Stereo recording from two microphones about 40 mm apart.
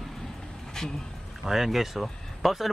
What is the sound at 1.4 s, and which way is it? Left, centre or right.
Speech, centre.